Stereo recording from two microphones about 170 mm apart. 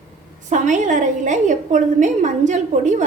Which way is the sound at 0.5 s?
45° right (ahead or behind).